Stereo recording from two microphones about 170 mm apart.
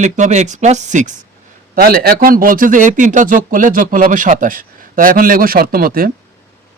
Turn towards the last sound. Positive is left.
turn(degrees=-55)  # may be behind; listen again after turning